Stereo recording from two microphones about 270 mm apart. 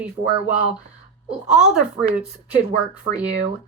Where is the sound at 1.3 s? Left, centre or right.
Centre.